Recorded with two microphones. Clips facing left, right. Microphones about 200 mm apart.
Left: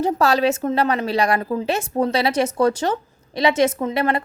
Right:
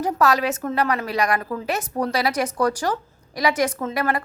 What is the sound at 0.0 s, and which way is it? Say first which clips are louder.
A woman's voice: left 3 dB; 30° left (ahead or behind).